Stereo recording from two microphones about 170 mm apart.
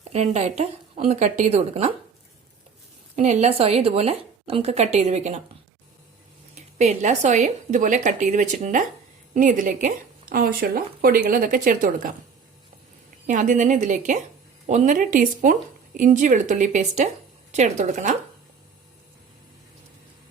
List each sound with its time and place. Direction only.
0.1 s a woman's voice: 40° right (ahead or behind)
3.2 s a woman's voice: 45° right (ahead or behind)
6.7 s a woman's voice: 40° right (ahead or behind)
13.2 s a woman's voice: 50° right (ahead or behind)